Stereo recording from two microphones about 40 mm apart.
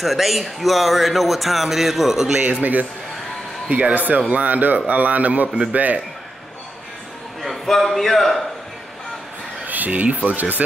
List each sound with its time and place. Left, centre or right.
0.0 s speech: centre
2.6 s speech: right
7.4 s speech: centre
9.7 s speech: right